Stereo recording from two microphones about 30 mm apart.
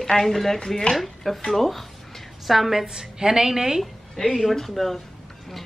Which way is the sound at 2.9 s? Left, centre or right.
Right.